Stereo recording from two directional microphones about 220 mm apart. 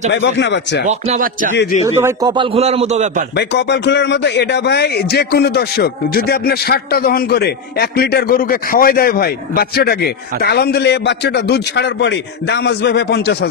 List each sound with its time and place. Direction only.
0.1 s a man's voice: 55° left (ahead or behind)
0.8 s speech: 30° right (ahead or behind)
2.0 s a man's voice: 15° right (ahead or behind); by 3.3 s 30° right (ahead or behind)
3.3 s a man's voice: 50° left (ahead or behind)